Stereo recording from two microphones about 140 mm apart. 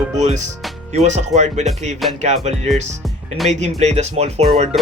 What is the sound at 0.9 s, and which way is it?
Music, 55° right (ahead or behind).